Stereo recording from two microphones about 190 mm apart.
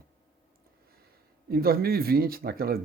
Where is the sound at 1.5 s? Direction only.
55° right (ahead or behind).